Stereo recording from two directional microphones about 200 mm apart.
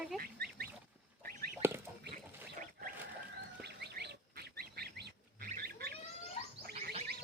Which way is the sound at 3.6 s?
55° right (ahead or behind).